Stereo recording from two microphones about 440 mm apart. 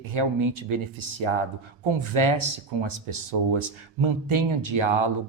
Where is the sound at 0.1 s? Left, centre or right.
Right.